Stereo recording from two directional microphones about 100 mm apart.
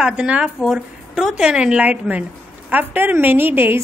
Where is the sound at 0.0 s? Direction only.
10° right (ahead or behind).